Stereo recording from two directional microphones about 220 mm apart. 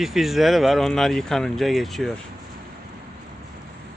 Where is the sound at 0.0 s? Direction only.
Centre (ahead or behind).